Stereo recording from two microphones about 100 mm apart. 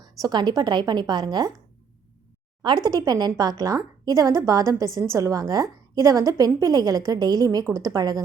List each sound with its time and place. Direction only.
0.0 s a woman's voice: 40° right (ahead or behind)
2.6 s a woman's voice: 45° right (ahead or behind)